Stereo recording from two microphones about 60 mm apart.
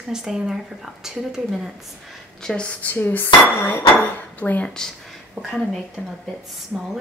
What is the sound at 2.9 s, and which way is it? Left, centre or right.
Speech, left.